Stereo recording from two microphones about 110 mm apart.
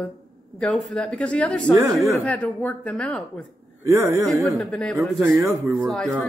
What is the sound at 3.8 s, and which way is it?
A man's voice, 25° right (ahead or behind).